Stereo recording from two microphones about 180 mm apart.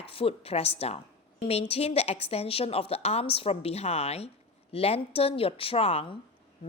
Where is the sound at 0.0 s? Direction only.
30° left (ahead or behind).